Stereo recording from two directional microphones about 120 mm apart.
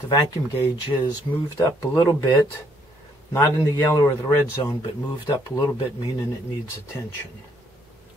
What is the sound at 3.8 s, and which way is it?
Speech, 30° left (ahead or behind).